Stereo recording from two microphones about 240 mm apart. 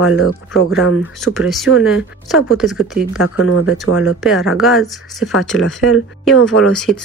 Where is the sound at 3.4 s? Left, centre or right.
Left.